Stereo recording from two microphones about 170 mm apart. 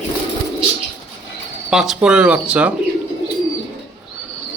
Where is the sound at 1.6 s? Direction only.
Centre (ahead or behind).